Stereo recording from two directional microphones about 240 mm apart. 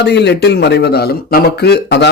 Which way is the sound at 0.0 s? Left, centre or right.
Left.